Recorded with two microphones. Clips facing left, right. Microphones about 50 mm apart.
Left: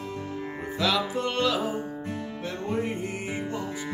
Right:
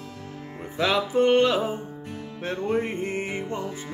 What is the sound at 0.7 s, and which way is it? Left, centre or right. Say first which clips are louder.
Music: right 4 dB; right.